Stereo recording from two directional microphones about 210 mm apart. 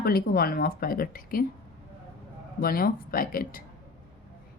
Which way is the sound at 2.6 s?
45° left (ahead or behind).